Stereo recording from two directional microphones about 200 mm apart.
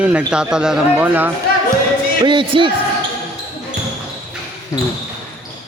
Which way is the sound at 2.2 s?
25° right (ahead or behind).